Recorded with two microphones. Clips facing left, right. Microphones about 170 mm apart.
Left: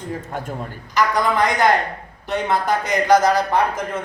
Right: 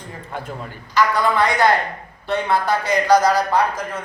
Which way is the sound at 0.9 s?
15° left (ahead or behind).